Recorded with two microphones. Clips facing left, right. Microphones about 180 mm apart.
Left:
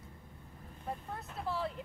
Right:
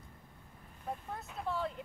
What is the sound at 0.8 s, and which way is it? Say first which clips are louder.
Vehicle: even; centre (ahead or behind).